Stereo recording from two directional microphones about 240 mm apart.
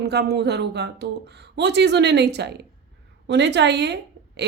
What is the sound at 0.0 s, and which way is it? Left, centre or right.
A woman's voice, right.